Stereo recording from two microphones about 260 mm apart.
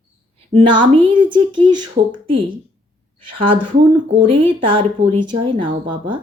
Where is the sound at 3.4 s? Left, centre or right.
Centre.